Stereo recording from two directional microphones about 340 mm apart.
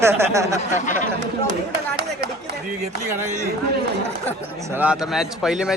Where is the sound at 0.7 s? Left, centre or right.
Left.